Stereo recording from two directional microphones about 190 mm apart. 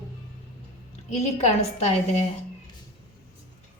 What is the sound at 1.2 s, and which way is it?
Speech, 35° left (ahead or behind).